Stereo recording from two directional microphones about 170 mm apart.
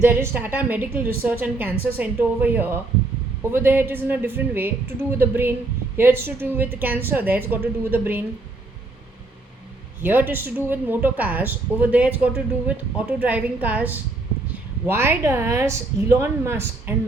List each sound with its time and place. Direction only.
0.0 s a woman's voice: 15° right (ahead or behind)
10.0 s a woman's voice: 10° right (ahead or behind)